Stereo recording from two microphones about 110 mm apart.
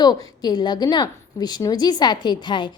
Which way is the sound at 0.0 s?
40° left (ahead or behind).